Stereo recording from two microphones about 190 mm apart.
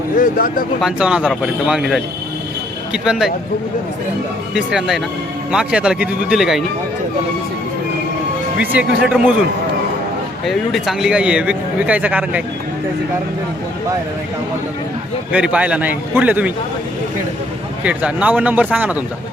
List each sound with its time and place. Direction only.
0.2 s speech: 45° left (ahead or behind)
0.8 s a man's voice: 5° right (ahead or behind)
4.5 s a man's voice: centre (ahead or behind)
8.5 s a man's voice: 5° right (ahead or behind)
10.4 s a man's voice: centre (ahead or behind)
15.3 s speech: 5° right (ahead or behind)
17.8 s speech: 5° right (ahead or behind)